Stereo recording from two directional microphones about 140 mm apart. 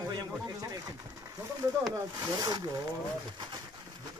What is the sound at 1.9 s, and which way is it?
Speech, 25° right (ahead or behind).